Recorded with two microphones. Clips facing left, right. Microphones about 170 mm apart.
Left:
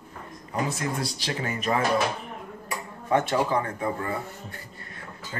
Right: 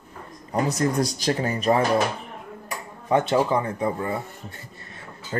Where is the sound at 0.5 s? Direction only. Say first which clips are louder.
Right 6 dB; 40° right (ahead or behind).